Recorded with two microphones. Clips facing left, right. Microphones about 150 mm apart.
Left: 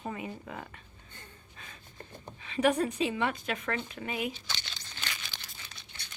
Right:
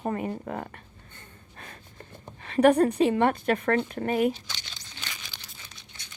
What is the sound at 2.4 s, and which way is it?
A woman's voice, 60° right (ahead or behind).